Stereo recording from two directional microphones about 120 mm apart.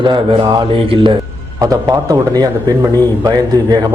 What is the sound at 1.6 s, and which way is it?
A man's voice, 30° right (ahead or behind).